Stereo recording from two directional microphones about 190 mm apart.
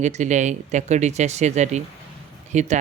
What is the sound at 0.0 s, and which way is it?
Speech, 40° right (ahead or behind).